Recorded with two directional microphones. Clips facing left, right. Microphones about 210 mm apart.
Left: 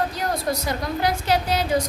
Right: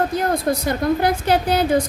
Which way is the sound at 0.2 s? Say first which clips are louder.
Right 5 dB; 55° right (ahead or behind).